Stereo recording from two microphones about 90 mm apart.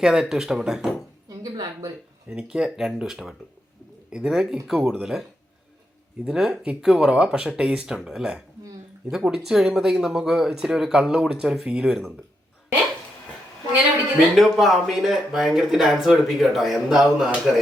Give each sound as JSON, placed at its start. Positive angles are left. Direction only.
{"t": 0.0, "sound": "speech", "side_deg": -5}
{"t": 1.3, "sound": "a sound", "side_deg": -45}
{"t": 2.4, "sound": "speech", "side_deg": -5}
{"t": 6.2, "sound": "speech", "side_deg": -5}
{"t": 14.3, "sound": "speech", "side_deg": 0}